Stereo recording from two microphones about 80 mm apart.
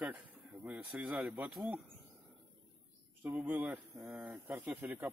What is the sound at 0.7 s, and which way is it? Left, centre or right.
Speech, centre.